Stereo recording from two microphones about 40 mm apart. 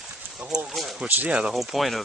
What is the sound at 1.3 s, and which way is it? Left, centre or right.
Speech, right.